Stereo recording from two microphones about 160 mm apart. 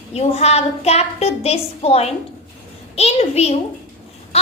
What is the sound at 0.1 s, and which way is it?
A woman's voice, 40° left (ahead or behind).